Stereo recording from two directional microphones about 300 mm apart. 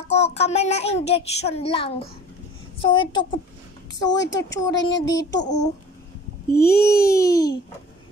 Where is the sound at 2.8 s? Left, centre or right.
Centre.